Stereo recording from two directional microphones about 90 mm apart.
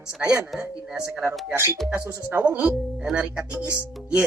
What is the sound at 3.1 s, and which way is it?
Mantra, 15° right (ahead or behind).